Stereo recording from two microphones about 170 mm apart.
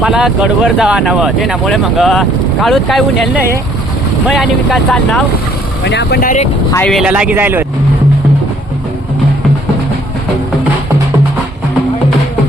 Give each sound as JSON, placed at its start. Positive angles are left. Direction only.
{"t": 0.0, "sound": "speech", "side_deg": -5}
{"t": 5.8, "sound": "speech", "side_deg": 85}
{"t": 6.8, "sound": "speech", "side_deg": 0}